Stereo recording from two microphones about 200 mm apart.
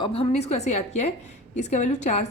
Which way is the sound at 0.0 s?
30° left (ahead or behind).